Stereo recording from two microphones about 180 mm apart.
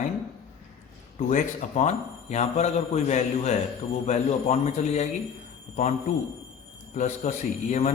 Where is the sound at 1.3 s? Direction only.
40° left (ahead or behind).